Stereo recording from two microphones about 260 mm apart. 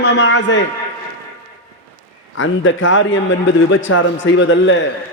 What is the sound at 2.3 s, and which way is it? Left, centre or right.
A man's voice, left.